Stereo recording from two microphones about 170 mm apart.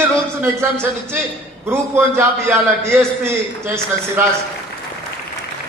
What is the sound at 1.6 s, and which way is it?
A man's voice, 15° right (ahead or behind).